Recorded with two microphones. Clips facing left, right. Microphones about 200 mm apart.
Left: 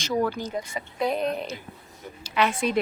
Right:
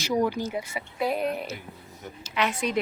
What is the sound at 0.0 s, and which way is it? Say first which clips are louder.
Speech: right 1 dB; 15° right (ahead or behind).